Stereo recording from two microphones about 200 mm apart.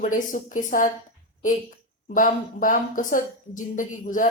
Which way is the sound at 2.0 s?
40° left (ahead or behind).